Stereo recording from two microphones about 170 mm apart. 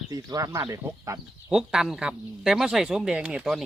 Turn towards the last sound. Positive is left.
turn(degrees=-5)  # may be behind; listen again after turning